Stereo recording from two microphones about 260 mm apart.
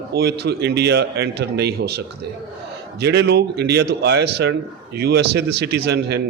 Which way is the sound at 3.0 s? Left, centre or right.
Right.